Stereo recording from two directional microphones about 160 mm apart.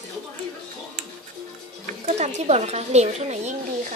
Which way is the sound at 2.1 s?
45° right (ahead or behind).